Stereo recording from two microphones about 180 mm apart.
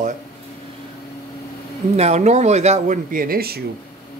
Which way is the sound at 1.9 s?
40° right (ahead or behind).